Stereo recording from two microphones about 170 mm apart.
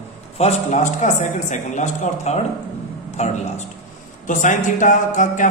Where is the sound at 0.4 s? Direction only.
40° left (ahead or behind).